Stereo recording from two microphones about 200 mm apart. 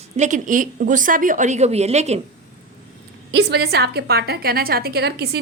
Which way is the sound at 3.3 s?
55° right (ahead or behind).